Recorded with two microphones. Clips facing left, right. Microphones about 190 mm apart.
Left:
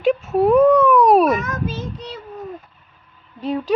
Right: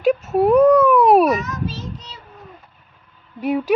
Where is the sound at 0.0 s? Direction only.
Centre (ahead or behind).